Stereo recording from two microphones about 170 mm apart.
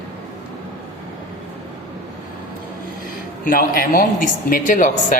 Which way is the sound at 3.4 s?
55° left (ahead or behind).